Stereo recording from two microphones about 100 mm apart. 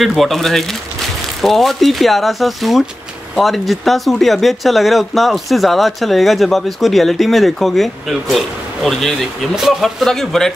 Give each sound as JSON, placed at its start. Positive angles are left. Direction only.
{"t": 0.0, "sound": "speech", "side_deg": 0}